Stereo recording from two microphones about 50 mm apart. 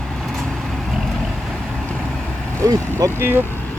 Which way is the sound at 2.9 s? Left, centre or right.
Right.